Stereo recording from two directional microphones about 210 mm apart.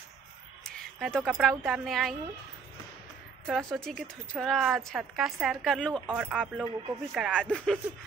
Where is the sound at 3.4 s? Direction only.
Centre (ahead or behind).